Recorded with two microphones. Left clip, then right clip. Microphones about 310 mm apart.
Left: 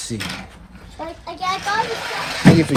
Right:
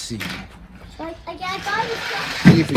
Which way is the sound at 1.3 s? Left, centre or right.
Centre.